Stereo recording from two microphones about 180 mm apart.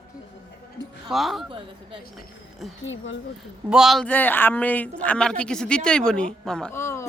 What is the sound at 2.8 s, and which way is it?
Speech, 90° left.